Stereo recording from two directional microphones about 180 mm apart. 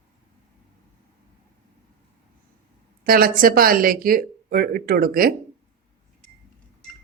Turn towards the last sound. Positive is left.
turn(degrees=-55)  # may be behind; listen again after turning